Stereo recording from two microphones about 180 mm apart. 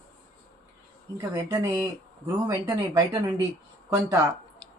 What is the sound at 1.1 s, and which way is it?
Speech, 15° right (ahead or behind).